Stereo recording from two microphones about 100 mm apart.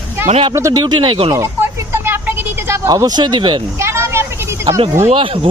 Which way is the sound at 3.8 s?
25° right (ahead or behind).